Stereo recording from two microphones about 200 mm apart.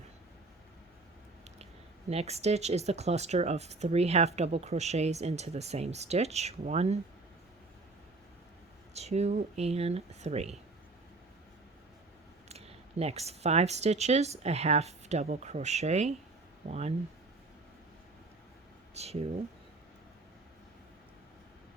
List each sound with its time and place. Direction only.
2.0 s speech: 30° right (ahead or behind)
8.9 s speech: 35° right (ahead or behind)
12.5 s speech: 30° right (ahead or behind)
18.9 s speech: 30° right (ahead or behind)